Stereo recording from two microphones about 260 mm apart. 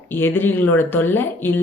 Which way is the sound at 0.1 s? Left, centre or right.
Centre.